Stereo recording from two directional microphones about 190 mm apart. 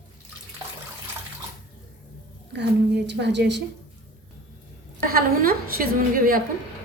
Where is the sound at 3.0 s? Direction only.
65° right (ahead or behind).